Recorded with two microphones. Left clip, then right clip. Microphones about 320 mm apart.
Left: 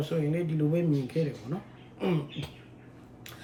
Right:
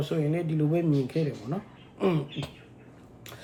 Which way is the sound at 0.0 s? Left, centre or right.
Centre.